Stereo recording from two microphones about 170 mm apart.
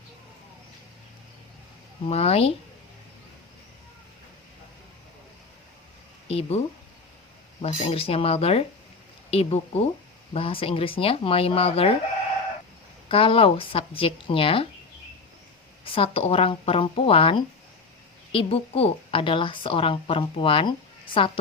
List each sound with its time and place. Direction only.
2.0 s a woman's voice: 35° left (ahead or behind)
6.2 s speech: 35° left (ahead or behind)
7.6 s a woman's voice: 35° left (ahead or behind)
13.1 s a woman's voice: 30° left (ahead or behind)
15.8 s a woman's voice: 30° left (ahead or behind)